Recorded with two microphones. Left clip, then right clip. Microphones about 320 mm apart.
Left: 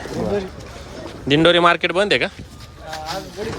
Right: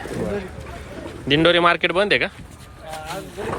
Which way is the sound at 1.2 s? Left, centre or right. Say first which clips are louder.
Left 2 dB; centre.